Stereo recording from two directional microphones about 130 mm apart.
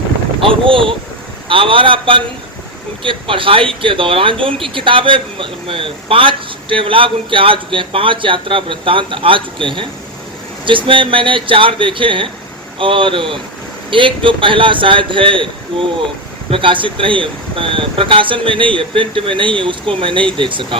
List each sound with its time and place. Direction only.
0.4 s a man's voice: 40° right (ahead or behind)